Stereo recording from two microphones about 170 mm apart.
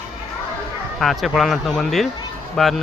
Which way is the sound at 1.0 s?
Centre (ahead or behind).